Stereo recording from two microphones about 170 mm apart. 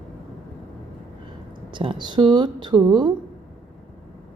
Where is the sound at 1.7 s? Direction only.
30° right (ahead or behind).